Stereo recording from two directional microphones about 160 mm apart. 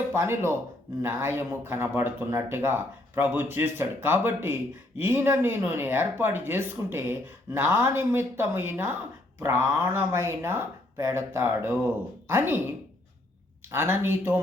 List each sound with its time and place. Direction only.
0.1 s speech: 15° right (ahead or behind)